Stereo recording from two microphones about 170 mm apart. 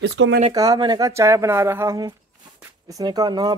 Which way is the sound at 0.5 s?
20° right (ahead or behind).